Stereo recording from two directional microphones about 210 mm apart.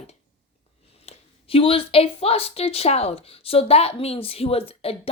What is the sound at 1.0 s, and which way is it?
A woman's voice, 25° left (ahead or behind).